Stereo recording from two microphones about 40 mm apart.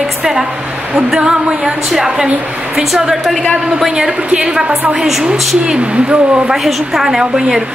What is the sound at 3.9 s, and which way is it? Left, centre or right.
A woman's voice, centre.